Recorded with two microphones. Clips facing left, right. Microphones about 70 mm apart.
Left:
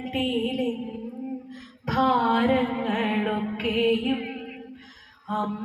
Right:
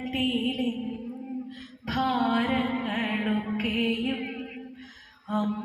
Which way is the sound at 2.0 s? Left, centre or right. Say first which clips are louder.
Left 4 dB; left.